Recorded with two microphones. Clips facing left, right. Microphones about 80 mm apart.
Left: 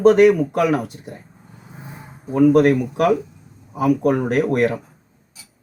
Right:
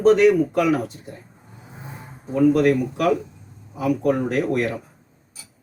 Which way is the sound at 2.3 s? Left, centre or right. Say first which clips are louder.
Left 3 dB; left.